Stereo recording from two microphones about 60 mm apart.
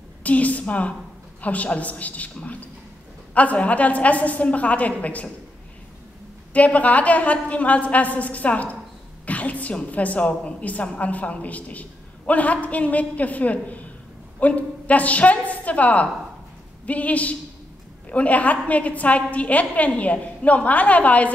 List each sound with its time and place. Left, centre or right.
0.2 s a woman's voice: left
6.5 s a woman's voice: left